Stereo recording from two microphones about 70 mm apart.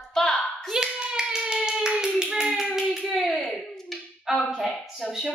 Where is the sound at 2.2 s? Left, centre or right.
Centre.